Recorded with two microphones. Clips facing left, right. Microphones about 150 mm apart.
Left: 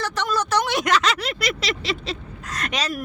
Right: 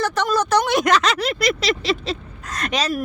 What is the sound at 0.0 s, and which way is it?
Speech, 45° right (ahead or behind).